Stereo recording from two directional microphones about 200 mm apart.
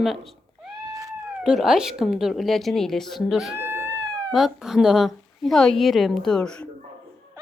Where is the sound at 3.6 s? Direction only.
10° right (ahead or behind).